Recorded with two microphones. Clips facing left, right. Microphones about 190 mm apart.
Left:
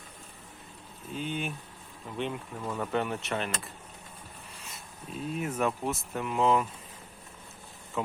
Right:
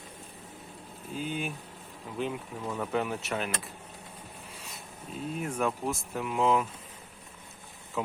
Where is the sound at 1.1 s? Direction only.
Centre (ahead or behind).